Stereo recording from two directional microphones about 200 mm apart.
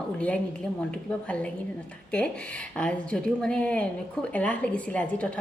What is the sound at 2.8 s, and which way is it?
A woman's voice, 5° left (ahead or behind).